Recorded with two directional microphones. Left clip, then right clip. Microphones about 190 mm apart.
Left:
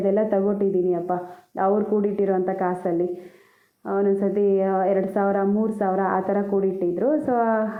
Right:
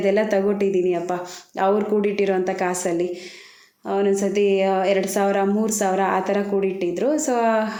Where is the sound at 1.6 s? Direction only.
15° right (ahead or behind).